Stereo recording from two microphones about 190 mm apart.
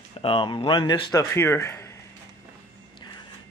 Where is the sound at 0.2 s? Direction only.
30° left (ahead or behind).